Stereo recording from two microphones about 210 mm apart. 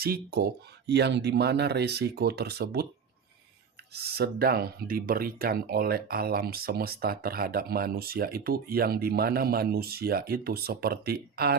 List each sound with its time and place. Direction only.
0.0 s speech: 50° right (ahead or behind)
3.9 s speech: 50° right (ahead or behind)